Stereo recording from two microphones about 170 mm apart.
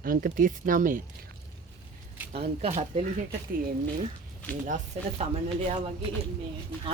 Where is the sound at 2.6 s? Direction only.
40° right (ahead or behind).